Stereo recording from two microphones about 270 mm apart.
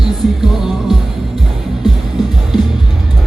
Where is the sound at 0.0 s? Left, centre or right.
Centre.